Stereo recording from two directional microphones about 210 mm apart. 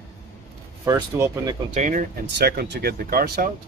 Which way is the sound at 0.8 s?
15° right (ahead or behind).